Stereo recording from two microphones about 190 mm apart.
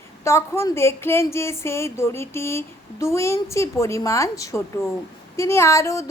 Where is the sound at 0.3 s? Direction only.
15° left (ahead or behind).